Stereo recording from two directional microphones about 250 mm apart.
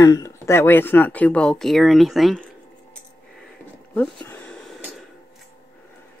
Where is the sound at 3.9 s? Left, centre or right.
Centre.